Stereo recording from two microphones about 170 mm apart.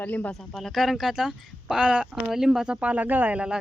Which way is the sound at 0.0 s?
10° left (ahead or behind).